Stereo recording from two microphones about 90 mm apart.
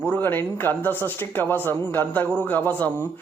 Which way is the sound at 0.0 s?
20° left (ahead or behind).